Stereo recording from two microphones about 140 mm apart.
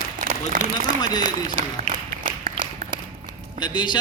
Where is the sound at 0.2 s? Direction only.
70° right (ahead or behind).